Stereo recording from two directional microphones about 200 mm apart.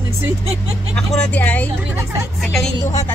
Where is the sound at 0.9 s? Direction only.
5° left (ahead or behind).